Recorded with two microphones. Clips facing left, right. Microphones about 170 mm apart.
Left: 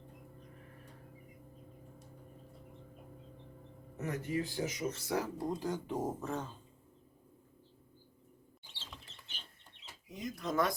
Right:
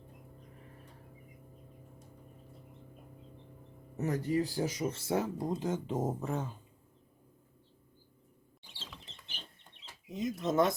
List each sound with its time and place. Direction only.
3.9 s speech: 35° right (ahead or behind); by 6.6 s 15° right (ahead or behind)
10.1 s speech: 25° right (ahead or behind)